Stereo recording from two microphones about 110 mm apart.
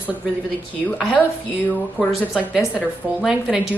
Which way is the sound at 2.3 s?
10° right (ahead or behind).